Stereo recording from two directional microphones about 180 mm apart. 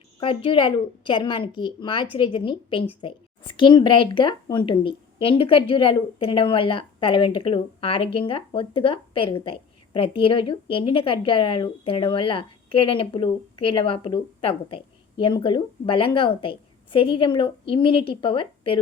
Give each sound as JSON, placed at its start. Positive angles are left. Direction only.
{"t": 0.2, "sound": "a woman's voice", "side_deg": 30}